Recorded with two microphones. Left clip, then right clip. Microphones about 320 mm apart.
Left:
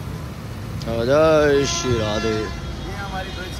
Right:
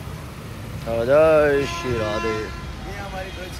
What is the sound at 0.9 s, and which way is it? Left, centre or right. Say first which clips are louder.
Vehicle: even; centre.